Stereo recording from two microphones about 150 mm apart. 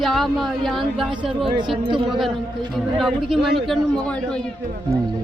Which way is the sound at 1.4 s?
30° right (ahead or behind).